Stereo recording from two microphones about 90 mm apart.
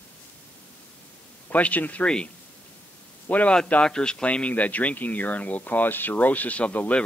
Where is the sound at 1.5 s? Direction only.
20° left (ahead or behind).